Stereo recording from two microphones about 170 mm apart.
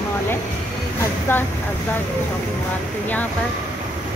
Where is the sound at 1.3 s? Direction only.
10° left (ahead or behind).